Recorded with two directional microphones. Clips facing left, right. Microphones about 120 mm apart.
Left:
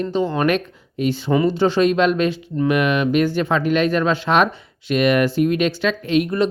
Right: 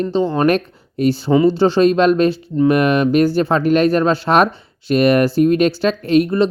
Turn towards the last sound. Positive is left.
turn(degrees=-35)  # may be behind; listen again after turning